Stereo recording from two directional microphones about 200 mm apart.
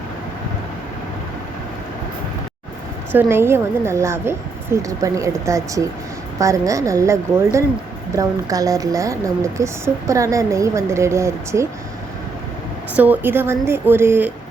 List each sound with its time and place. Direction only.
3.1 s a woman's voice: 10° right (ahead or behind)
12.9 s a woman's voice: 10° right (ahead or behind)